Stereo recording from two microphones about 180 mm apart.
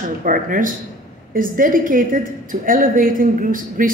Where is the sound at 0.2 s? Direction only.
50° right (ahead or behind).